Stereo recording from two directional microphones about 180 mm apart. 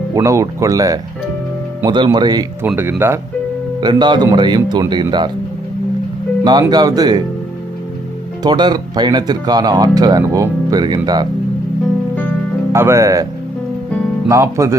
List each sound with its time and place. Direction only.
0.1 s speech: 15° right (ahead or behind)
2.6 s speech: 10° right (ahead or behind)
3.8 s speech: 25° right (ahead or behind)
6.4 s speech: 25° right (ahead or behind)
8.4 s speech: 25° right (ahead or behind)
12.7 s speech: 15° right (ahead or behind)
14.3 s speech: 15° right (ahead or behind)